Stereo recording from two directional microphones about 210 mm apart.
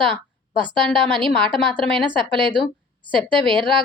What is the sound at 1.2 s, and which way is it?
Speech, centre (ahead or behind).